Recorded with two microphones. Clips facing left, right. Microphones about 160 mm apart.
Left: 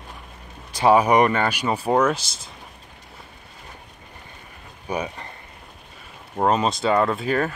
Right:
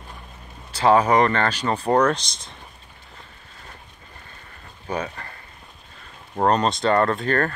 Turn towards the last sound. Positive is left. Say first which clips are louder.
# even
turn(degrees=5)  # may be behind; listen again after turning